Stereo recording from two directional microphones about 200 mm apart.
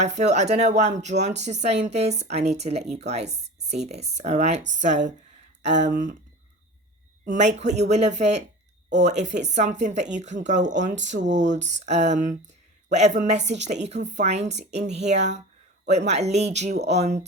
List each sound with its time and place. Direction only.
0.0 s speech: 35° right (ahead or behind)
7.3 s speech: 35° right (ahead or behind)